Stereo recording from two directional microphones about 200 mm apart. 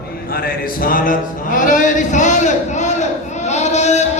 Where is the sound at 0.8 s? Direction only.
45° left (ahead or behind).